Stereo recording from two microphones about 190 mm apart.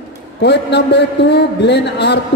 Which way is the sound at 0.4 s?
60° left (ahead or behind).